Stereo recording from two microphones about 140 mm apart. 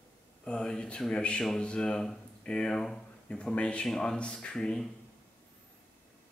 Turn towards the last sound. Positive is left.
turn(degrees=5)  # may be behind; listen again after turning